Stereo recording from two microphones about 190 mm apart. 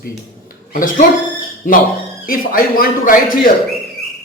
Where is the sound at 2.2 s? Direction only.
50° left (ahead or behind).